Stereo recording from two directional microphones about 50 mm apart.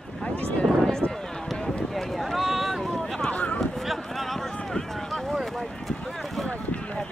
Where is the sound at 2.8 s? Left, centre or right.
Centre.